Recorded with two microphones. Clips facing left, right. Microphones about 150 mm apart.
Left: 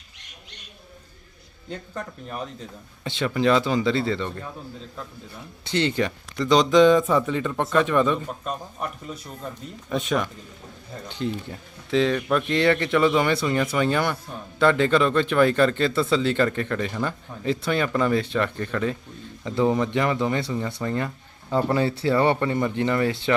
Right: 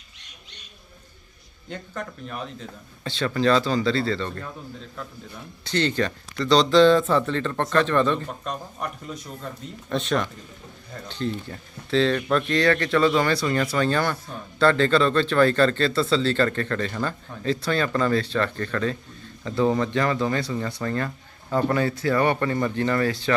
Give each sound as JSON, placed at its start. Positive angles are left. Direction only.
{"t": 3.0, "sound": "speech", "side_deg": 15}
{"t": 5.7, "sound": "speech", "side_deg": 15}
{"t": 12.5, "sound": "speech", "side_deg": 20}
{"t": 21.7, "sound": "speech", "side_deg": 30}